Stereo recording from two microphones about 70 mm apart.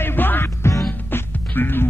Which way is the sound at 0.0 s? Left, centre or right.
Left.